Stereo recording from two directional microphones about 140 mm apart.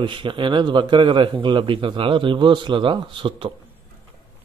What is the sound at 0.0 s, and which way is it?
A man's voice, 35° right (ahead or behind).